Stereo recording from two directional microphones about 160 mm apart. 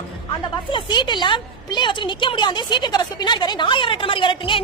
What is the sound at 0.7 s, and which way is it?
A woman's voice, 30° left (ahead or behind).